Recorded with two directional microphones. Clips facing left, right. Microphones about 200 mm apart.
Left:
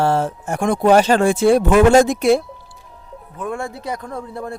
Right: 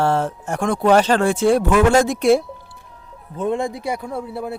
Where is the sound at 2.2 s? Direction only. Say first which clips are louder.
Even; centre (ahead or behind).